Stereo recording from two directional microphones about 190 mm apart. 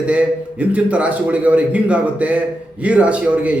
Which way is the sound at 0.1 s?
5° right (ahead or behind).